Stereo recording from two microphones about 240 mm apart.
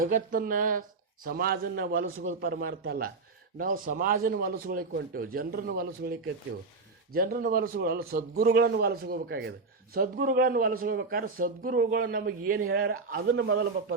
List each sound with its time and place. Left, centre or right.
0.0 s speech: right
12.5 s a man's voice: right